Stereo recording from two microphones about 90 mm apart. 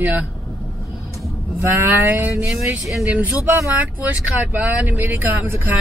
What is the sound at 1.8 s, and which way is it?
Speech, 20° right (ahead or behind).